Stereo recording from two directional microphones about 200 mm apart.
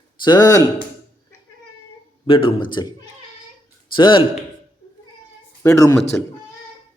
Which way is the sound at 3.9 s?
25° left (ahead or behind).